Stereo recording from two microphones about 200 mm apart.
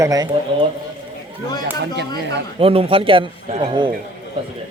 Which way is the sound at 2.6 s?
30° right (ahead or behind).